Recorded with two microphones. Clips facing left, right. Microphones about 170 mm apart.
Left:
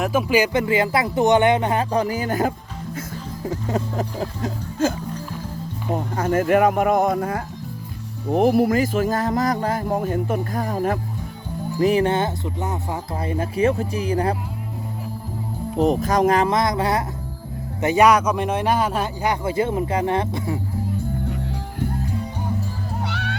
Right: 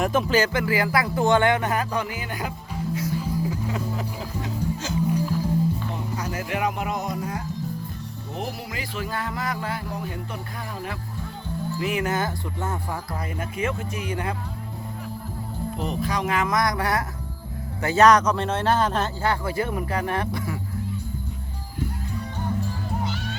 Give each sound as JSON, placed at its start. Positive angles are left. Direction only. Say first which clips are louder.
{"t": 0.0, "sound": "speech", "louder": "left 2 dB", "side_deg": 10}
{"t": 3.5, "sound": "speech", "louder": "left 4 dB", "side_deg": 40}
{"t": 4.4, "sound": "speech", "louder": "left 7 dB", "side_deg": 50}
{"t": 11.8, "sound": "speech", "louder": "left 8 dB", "side_deg": 35}
{"t": 13.2, "sound": "speech", "louder": "left 10 dB", "side_deg": 30}
{"t": 15.8, "sound": "speech", "louder": "left 10 dB", "side_deg": 45}
{"t": 23.0, "sound": "music", "louder": "left 2 dB", "side_deg": 65}